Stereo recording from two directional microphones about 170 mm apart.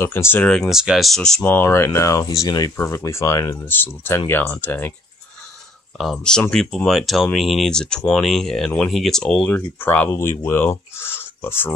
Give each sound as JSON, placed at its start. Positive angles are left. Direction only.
{"t": 0.0, "sound": "speech", "side_deg": 15}
{"t": 0.5, "sound": "speech", "side_deg": 0}
{"t": 1.4, "sound": "speech", "side_deg": 15}
{"t": 5.9, "sound": "speech", "side_deg": 5}